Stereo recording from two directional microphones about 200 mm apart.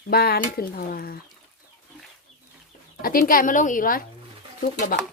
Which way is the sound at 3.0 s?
45° left (ahead or behind).